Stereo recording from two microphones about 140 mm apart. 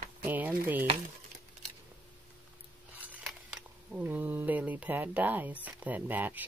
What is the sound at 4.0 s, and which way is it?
Speech, 10° right (ahead or behind).